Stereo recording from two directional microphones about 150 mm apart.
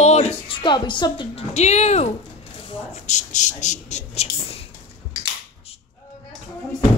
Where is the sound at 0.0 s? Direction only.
45° left (ahead or behind).